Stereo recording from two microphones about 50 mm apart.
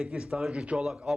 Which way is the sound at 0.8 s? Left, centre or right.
Centre.